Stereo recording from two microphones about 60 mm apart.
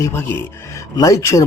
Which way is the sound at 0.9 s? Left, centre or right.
Left.